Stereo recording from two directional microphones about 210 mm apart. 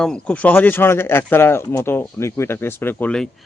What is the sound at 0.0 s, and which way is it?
Speech, 5° left (ahead or behind).